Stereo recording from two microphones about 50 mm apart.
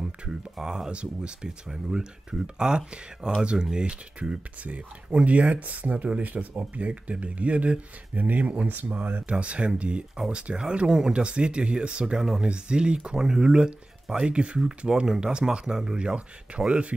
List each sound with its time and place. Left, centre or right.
0.0 s speech: centre